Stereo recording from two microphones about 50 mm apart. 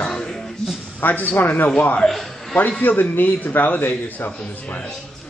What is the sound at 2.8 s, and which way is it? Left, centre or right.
A man's voice, left.